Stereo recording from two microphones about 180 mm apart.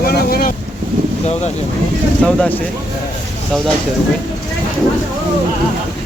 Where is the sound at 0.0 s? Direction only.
60° left (ahead or behind).